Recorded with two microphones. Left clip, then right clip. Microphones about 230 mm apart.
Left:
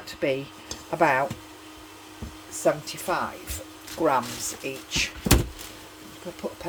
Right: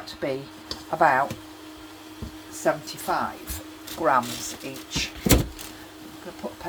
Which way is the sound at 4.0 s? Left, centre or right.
Centre.